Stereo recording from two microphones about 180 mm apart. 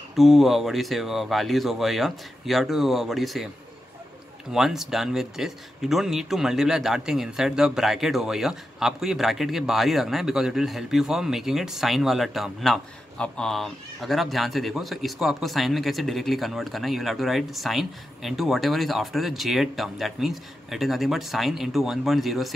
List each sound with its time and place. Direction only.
0.1 s speech: centre (ahead or behind)
4.5 s speech: centre (ahead or behind)